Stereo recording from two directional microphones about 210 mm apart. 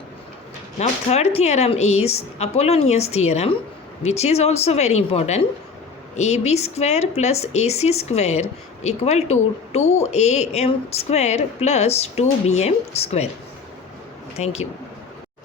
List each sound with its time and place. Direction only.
0.8 s speech: 30° left (ahead or behind)
14.3 s speech: 30° left (ahead or behind)